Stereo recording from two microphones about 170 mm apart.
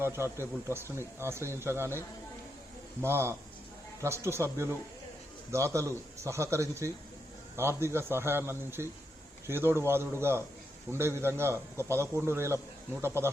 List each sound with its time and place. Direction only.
0.0 s a man's voice: 15° right (ahead or behind)
3.0 s a man's voice: 15° right (ahead or behind)